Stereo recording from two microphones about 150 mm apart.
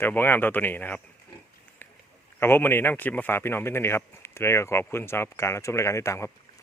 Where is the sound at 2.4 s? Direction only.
15° left (ahead or behind).